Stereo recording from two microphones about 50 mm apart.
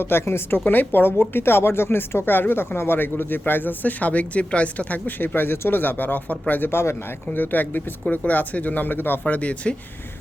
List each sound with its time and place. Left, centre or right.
0.0 s speech: left
5.0 s speech: left
6.7 s speech: left
7.3 s speech: left
9.2 s speech: left